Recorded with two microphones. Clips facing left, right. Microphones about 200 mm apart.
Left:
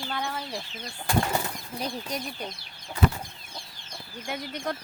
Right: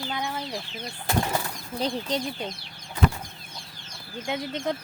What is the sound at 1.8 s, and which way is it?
Speech, 30° right (ahead or behind).